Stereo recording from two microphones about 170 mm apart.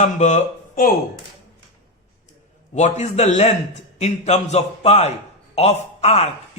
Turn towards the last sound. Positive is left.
turn(degrees=40)  # may be behind; listen again after turning